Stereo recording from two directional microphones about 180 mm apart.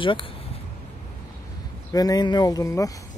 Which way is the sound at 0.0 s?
30° left (ahead or behind).